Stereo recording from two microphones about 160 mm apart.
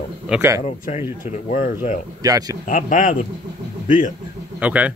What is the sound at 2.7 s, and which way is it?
Speech, 55° left (ahead or behind).